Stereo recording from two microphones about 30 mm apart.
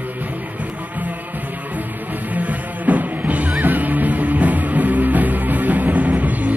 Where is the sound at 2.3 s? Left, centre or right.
Right.